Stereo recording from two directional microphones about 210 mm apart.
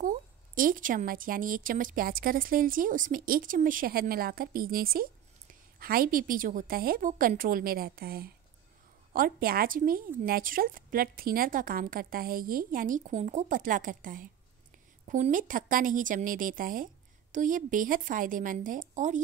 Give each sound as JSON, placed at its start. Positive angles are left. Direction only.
{"t": 0.0, "sound": "speech", "side_deg": -40}